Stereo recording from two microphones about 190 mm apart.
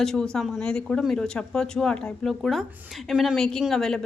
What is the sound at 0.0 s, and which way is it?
Speech, 5° left (ahead or behind).